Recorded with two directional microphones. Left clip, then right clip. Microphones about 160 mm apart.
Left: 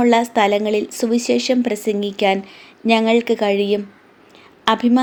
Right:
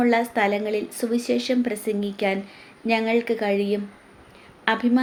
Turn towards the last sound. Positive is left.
turn(degrees=45)  # may be behind; listen again after turning